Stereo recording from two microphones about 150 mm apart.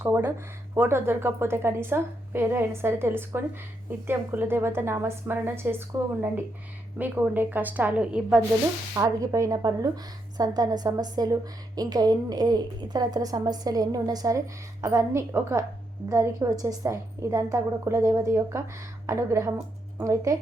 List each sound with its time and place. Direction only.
0.0 s speech: 15° right (ahead or behind)
9.0 s a woman's voice: 20° right (ahead or behind)